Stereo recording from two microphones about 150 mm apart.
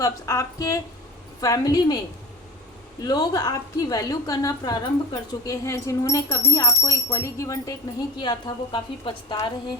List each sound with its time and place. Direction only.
0.0 s a woman's voice: 20° left (ahead or behind)
3.0 s a woman's voice: 25° left (ahead or behind)